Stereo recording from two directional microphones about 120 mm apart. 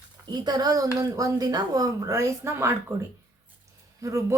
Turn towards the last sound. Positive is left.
turn(degrees=-25)  # may be behind; listen again after turning